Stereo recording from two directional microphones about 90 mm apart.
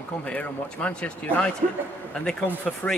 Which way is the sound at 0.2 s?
15° left (ahead or behind).